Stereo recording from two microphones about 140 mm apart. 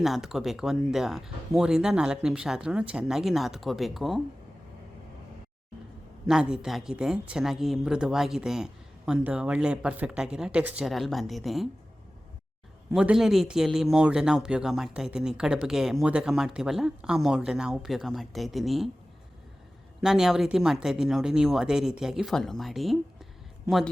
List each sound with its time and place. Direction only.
0.0 s speech: 5° right (ahead or behind)
6.2 s speech: 5° right (ahead or behind)
12.9 s speech: 5° right (ahead or behind)
20.0 s speech: 5° right (ahead or behind)